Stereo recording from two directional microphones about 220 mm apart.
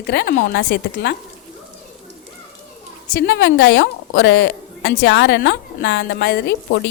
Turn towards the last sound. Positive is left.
turn(degrees=50)  # may be behind; listen again after turning